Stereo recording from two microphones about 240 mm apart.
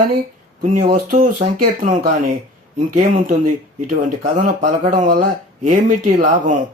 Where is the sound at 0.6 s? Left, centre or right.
Right.